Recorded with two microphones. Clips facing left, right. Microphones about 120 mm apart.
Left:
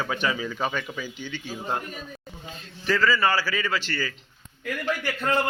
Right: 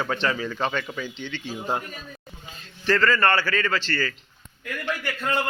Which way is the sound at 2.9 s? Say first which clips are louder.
Right 2 dB; 5° left (ahead or behind).